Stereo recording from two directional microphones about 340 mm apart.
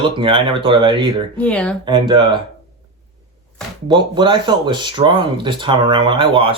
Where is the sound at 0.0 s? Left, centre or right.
Centre.